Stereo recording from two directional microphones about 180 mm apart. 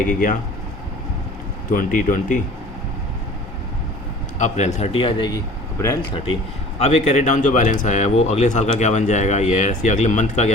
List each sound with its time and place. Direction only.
0.1 s speech: 45° left (ahead or behind)
1.7 s speech: 45° left (ahead or behind)
4.4 s speech: 40° left (ahead or behind); by 6.1 s 20° left (ahead or behind)
6.7 s speech: 35° left (ahead or behind)